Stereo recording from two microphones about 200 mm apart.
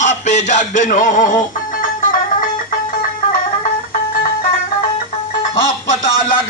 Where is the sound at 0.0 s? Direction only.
35° left (ahead or behind).